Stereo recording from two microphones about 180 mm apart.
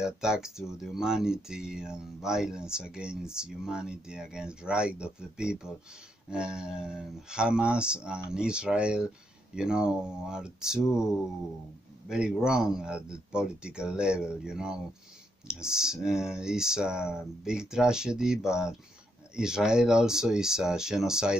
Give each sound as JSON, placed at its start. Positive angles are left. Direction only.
{"t": 0.0, "sound": "speech", "side_deg": -5}